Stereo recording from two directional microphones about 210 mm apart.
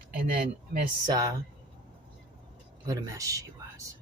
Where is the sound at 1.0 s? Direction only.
20° right (ahead or behind).